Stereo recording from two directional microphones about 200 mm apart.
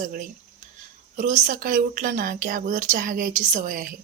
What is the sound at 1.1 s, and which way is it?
Speech, 40° right (ahead or behind).